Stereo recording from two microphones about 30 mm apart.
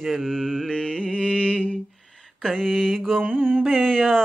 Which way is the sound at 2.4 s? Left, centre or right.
Centre.